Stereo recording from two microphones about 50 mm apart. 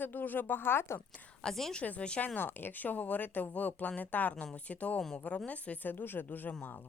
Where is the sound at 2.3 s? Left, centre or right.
Left.